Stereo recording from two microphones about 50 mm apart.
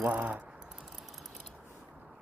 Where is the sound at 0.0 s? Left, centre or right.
Right.